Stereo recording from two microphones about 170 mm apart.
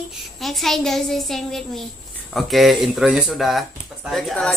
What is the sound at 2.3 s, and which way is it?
Speech, centre (ahead or behind).